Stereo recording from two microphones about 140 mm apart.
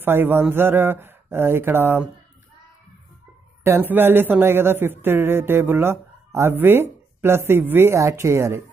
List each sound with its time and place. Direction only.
0.0 s speech: 15° right (ahead or behind)
3.6 s speech: 15° right (ahead or behind)